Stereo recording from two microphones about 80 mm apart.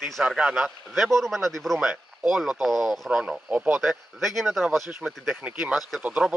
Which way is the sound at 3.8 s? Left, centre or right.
Centre.